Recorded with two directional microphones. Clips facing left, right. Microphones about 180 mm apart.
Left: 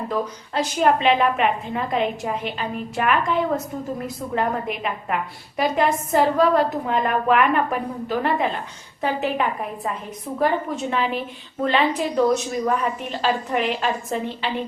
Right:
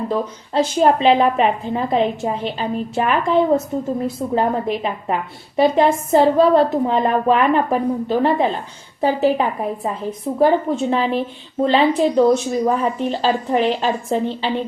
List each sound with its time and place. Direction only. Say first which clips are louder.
0.1 s a woman's voice: right 4 dB; 30° right (ahead or behind)